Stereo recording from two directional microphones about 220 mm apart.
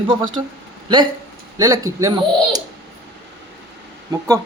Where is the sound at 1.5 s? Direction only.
15° right (ahead or behind).